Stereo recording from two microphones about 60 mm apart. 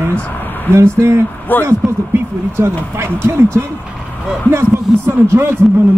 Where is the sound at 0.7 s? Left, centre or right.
Right.